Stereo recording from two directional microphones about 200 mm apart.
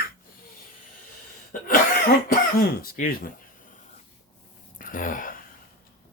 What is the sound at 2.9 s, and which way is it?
Speech, 45° left (ahead or behind).